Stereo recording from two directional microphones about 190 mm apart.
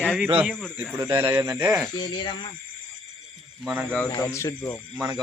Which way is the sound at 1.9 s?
25° left (ahead or behind).